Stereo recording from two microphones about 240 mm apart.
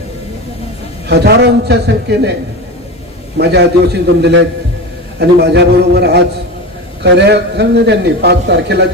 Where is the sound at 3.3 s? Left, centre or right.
Right.